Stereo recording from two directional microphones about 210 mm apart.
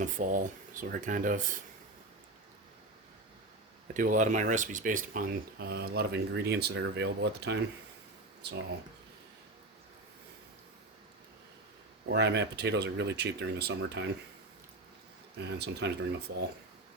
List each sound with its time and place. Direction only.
0.0 s speech: 40° right (ahead or behind)
3.9 s speech: 40° right (ahead or behind)
12.0 s speech: 55° right (ahead or behind)
15.4 s speech: 50° right (ahead or behind)